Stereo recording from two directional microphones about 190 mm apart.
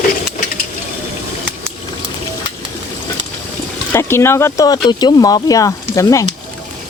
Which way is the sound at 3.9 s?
15° left (ahead or behind).